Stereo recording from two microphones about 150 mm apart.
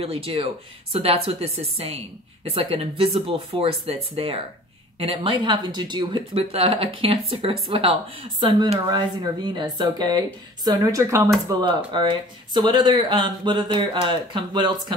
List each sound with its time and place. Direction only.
0.0 s speech: 40° right (ahead or behind); by 11.2 s 20° right (ahead or behind)
11.4 s speech: 30° right (ahead or behind)